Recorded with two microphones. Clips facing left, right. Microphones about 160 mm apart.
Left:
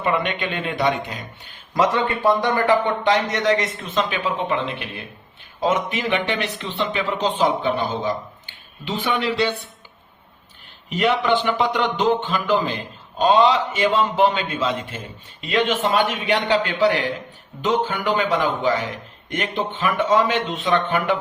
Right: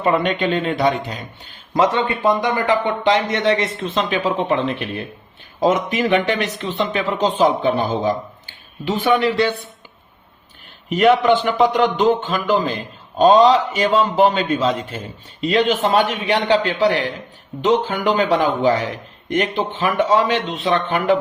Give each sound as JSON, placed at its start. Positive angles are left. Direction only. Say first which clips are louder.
{"t": 0.0, "sound": "a man's voice", "louder": "right 5 dB", "side_deg": -35}
{"t": 1.7, "sound": "a man's voice", "louder": "right 2 dB", "side_deg": -25}
{"t": 5.5, "sound": "speech", "louder": "right 4 dB", "side_deg": -40}
{"t": 10.8, "sound": "a man's voice", "louder": "right 6 dB", "side_deg": -45}